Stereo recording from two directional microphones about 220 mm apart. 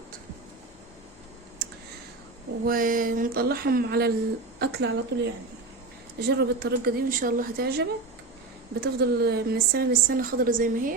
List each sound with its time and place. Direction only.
2.6 s a woman's voice: 40° right (ahead or behind)